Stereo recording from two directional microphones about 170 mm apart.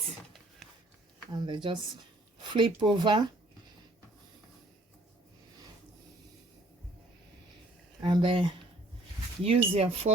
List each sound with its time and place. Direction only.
1.3 s speech: 25° right (ahead or behind)
8.0 s speech: 30° right (ahead or behind)